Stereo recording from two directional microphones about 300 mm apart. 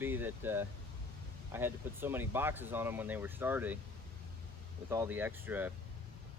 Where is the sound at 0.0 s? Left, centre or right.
Centre.